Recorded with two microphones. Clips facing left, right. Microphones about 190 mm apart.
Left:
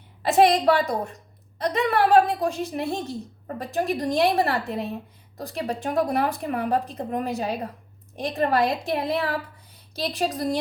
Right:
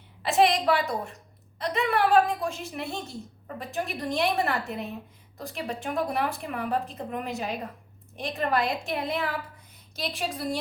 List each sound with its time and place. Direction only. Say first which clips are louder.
0.2 s a woman's voice: left 4 dB; 40° left (ahead or behind)